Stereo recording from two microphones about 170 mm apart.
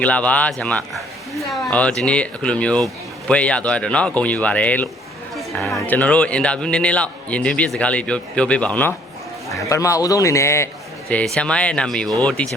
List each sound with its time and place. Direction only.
0.0 s speech: 10° left (ahead or behind)
5.3 s a sound: centre (ahead or behind)
5.8 s a man's voice: 10° left (ahead or behind)